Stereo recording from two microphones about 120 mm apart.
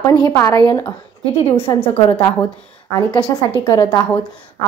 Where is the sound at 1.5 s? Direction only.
15° left (ahead or behind).